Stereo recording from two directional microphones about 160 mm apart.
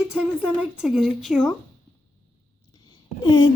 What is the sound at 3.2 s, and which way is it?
Speech, 25° left (ahead or behind).